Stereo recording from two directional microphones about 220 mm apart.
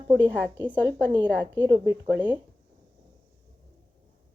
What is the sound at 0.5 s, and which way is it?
Speech, 10° right (ahead or behind).